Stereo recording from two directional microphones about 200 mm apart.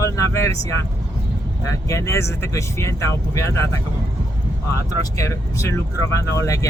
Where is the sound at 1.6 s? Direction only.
15° left (ahead or behind).